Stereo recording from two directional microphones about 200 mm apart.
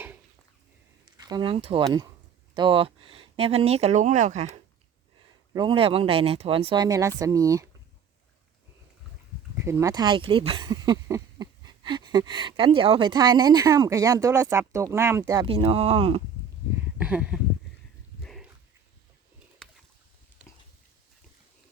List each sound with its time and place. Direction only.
1.0 s speech: 20° right (ahead or behind); by 4.4 s 40° right (ahead or behind)
5.5 s speech: 25° right (ahead or behind)
9.6 s speech: 15° right (ahead or behind)
15.4 s speech: 25° right (ahead or behind)
17.0 s speech: 5° right (ahead or behind)
18.2 s dog: centre (ahead or behind)
19.6 s a sound: 5° left (ahead or behind)